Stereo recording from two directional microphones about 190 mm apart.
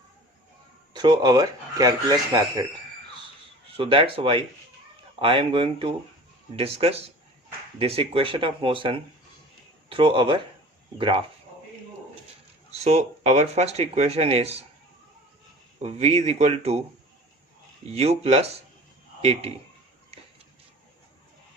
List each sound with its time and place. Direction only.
0.9 s speech: 25° right (ahead or behind)
3.7 s speech: 30° right (ahead or behind)
12.8 s speech: 35° right (ahead or behind)
15.8 s speech: 35° right (ahead or behind)
17.9 s speech: 35° right (ahead or behind)